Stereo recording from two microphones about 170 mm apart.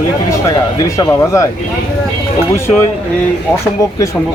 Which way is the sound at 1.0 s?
15° left (ahead or behind).